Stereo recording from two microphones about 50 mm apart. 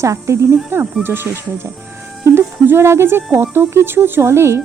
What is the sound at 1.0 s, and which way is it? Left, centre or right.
Speech, right.